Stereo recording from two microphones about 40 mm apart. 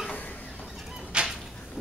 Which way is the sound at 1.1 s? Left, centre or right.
Right.